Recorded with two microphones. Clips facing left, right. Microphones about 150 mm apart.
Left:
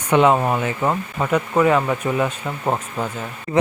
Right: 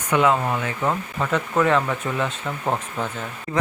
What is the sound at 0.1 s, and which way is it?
Speech, 20° left (ahead or behind).